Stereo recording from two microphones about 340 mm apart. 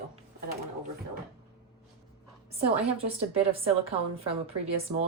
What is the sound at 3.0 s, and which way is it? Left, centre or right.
A woman's voice, centre.